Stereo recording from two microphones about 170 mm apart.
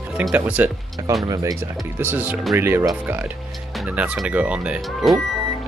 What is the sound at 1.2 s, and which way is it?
Speech, 20° right (ahead or behind).